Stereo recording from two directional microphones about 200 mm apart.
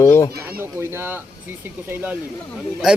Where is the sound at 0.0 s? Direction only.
15° left (ahead or behind).